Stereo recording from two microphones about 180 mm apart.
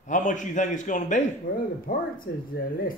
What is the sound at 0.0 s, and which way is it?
A man's voice, 45° left (ahead or behind).